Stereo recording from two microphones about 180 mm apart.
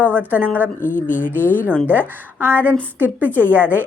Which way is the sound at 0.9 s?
45° left (ahead or behind).